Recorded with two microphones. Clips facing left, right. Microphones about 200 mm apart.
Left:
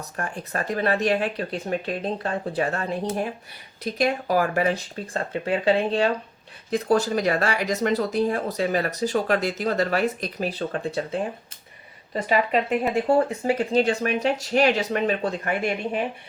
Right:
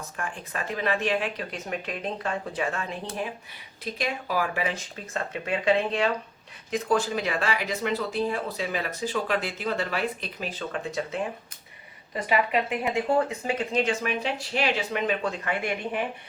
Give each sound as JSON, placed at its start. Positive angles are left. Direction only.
{"t": 0.0, "sound": "speech", "side_deg": 40}